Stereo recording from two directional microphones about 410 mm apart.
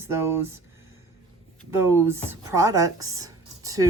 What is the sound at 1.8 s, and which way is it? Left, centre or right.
Speech, centre.